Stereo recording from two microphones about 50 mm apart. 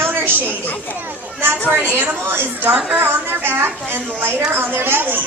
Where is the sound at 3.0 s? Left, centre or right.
Right.